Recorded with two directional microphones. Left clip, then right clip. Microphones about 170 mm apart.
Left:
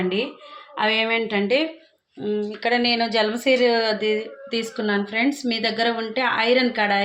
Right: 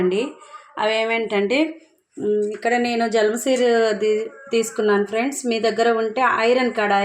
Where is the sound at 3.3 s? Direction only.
55° right (ahead or behind).